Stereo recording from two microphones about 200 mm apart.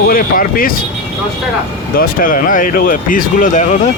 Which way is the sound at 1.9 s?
45° left (ahead or behind).